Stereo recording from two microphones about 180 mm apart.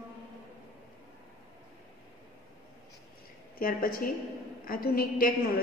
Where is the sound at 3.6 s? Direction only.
50° left (ahead or behind).